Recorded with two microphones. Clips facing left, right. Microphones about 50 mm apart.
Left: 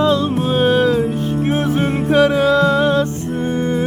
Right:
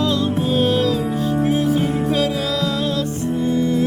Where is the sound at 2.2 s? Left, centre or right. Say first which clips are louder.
Left 8 dB; left.